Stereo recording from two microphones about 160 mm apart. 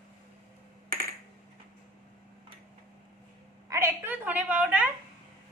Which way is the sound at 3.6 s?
15° right (ahead or behind).